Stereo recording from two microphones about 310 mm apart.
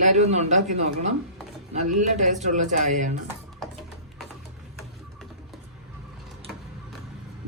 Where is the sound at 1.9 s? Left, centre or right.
Right.